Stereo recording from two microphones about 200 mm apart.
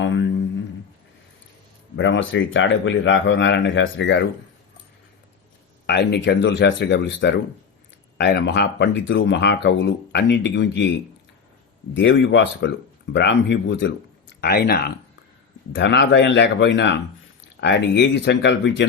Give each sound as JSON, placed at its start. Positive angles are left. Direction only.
{"t": 0.0, "sound": "a sound", "side_deg": 65}
{"t": 2.0, "sound": "speech", "side_deg": 65}
{"t": 5.8, "sound": "speech", "side_deg": 55}
{"t": 11.9, "sound": "speech", "side_deg": 65}